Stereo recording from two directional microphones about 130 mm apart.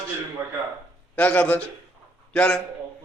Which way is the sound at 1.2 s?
10° left (ahead or behind).